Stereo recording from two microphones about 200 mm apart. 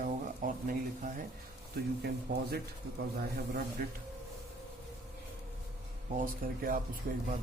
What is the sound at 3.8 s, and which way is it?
Speech, 45° right (ahead or behind).